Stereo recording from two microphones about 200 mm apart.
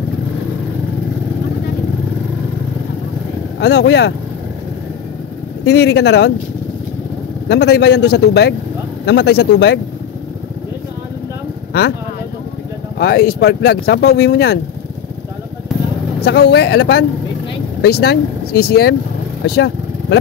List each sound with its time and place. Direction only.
3.5 s a man's voice: 60° left (ahead or behind)
5.7 s a man's voice: 55° left (ahead or behind)
7.4 s a man's voice: 55° left (ahead or behind)
13.0 s speech: 50° left (ahead or behind)
16.2 s a man's voice: 55° left (ahead or behind)
19.4 s vehicle: 55° left (ahead or behind)